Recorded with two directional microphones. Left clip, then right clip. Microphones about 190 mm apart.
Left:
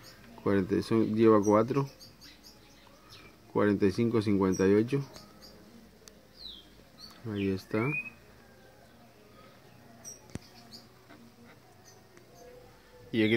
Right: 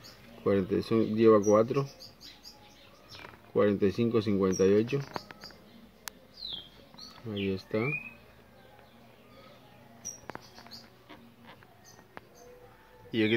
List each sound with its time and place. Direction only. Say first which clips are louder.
0.4 s speech: right 1 dB; 10° left (ahead or behind)
3.5 s speech: right 1 dB; 15° left (ahead or behind)
7.4 s speech: even; 20° left (ahead or behind)